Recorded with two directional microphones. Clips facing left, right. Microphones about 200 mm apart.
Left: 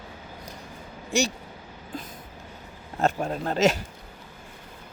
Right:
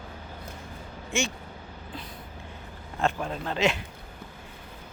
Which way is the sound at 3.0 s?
40° left (ahead or behind).